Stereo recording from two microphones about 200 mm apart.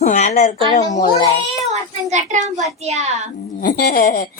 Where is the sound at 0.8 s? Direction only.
20° left (ahead or behind).